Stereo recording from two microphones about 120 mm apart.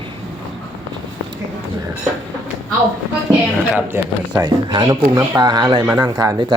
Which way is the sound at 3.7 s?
20° right (ahead or behind).